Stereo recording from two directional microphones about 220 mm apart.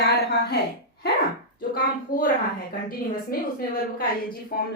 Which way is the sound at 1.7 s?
40° left (ahead or behind).